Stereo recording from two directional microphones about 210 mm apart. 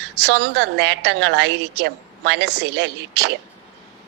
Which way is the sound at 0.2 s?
55° right (ahead or behind).